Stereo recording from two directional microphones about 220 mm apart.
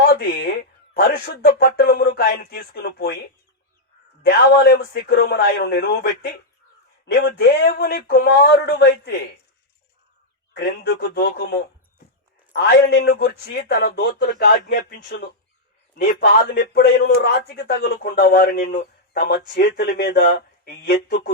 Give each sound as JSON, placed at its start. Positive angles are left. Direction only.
{"t": 0.0, "sound": "a sound", "side_deg": 50}
{"t": 0.9, "sound": "a man's voice", "side_deg": 45}
{"t": 4.3, "sound": "a man's voice", "side_deg": 45}
{"t": 10.5, "sound": "a man's voice", "side_deg": 50}